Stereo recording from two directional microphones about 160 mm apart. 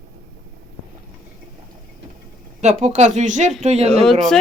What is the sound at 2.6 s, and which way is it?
Speech, 45° right (ahead or behind).